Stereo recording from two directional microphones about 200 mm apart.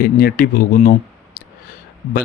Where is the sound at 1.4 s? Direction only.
50° left (ahead or behind).